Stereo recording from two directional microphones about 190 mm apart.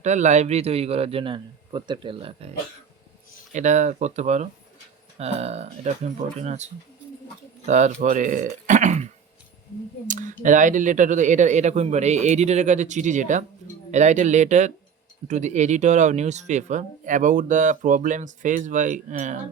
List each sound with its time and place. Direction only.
0.0 s speech: 40° right (ahead or behind)
3.5 s speech: 40° right (ahead or behind)
10.1 s speech: 45° right (ahead or behind)